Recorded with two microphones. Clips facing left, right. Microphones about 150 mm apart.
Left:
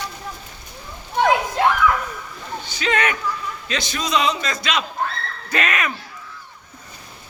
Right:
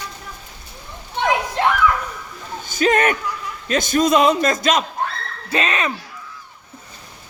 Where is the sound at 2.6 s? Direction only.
45° right (ahead or behind).